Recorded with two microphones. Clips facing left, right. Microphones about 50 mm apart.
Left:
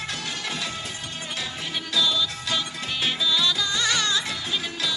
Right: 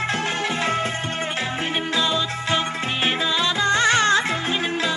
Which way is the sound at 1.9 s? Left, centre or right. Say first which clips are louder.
Left 1 dB; right.